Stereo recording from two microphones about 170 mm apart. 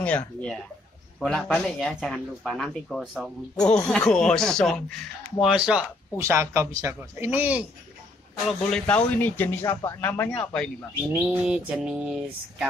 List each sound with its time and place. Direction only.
1.2 s a man's voice: 5° left (ahead or behind)
8.5 s speech: 5° left (ahead or behind)
11.1 s speech: 10° right (ahead or behind)